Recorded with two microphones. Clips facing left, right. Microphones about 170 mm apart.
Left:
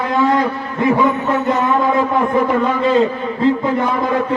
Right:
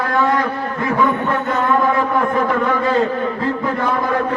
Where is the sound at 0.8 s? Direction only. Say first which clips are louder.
Left 3 dB; 20° left (ahead or behind).